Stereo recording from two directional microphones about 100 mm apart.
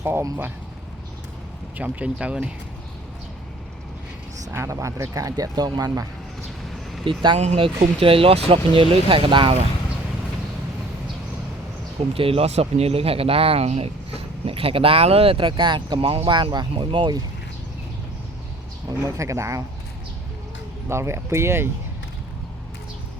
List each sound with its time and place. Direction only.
0.0 s speech: 25° right (ahead or behind)
1.8 s speech: 15° right (ahead or behind)
4.5 s speech: 30° right (ahead or behind)
7.3 s speech: 80° right; by 9.6 s 60° right (ahead or behind)
12.1 s speech: 70° right (ahead or behind); by 17.2 s 45° right (ahead or behind)
18.9 s speech: 35° right (ahead or behind)
20.8 s speech: 25° right (ahead or behind)